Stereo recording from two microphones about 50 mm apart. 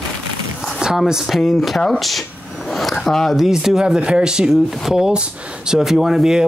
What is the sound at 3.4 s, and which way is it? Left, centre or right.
Speech, centre.